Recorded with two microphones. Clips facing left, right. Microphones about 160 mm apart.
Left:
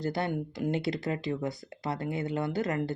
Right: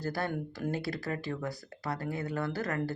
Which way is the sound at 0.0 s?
20° left (ahead or behind).